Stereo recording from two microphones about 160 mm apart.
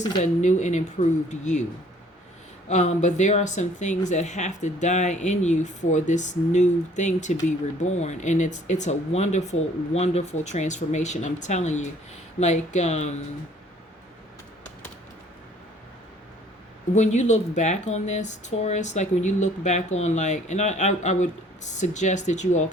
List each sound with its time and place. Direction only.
0.2 s speech: 50° left (ahead or behind)
2.6 s speech: 45° left (ahead or behind)
16.9 s speech: 45° left (ahead or behind)